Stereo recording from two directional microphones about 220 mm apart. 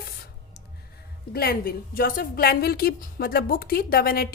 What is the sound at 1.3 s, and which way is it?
A woman's voice, 45° left (ahead or behind).